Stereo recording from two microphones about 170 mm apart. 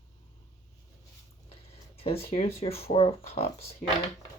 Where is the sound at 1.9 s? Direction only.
35° left (ahead or behind).